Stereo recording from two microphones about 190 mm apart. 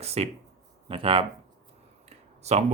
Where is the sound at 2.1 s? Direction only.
35° right (ahead or behind).